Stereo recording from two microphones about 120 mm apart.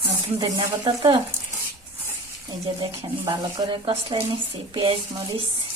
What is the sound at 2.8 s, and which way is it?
Speech, 35° right (ahead or behind).